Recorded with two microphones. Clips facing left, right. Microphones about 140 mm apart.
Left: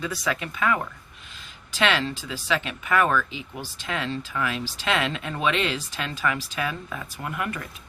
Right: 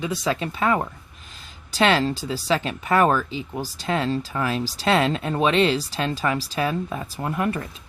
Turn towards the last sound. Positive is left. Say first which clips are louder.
# right 6 dB
turn(degrees=-30)  # may be behind; listen again after turning